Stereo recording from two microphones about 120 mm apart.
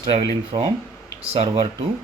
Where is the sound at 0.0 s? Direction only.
45° right (ahead or behind).